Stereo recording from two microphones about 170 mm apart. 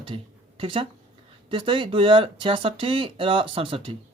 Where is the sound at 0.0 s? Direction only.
30° right (ahead or behind).